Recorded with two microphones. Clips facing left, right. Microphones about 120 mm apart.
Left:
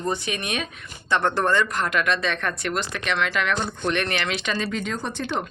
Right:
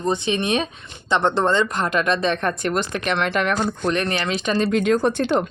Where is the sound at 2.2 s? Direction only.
35° right (ahead or behind).